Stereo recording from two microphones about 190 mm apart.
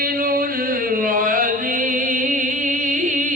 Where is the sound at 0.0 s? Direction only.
50° right (ahead or behind).